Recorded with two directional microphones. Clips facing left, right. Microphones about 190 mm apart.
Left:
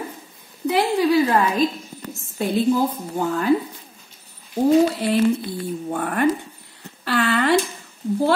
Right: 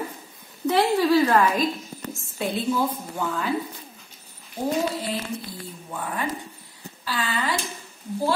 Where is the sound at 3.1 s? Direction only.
45° left (ahead or behind).